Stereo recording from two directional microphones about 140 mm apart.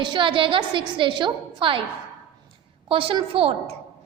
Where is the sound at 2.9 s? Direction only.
40° right (ahead or behind).